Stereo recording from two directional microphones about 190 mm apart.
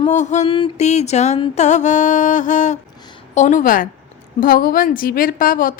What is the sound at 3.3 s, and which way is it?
Speech, 40° left (ahead or behind).